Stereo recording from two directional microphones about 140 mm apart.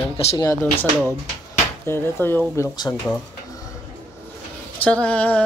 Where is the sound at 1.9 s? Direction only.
15° left (ahead or behind).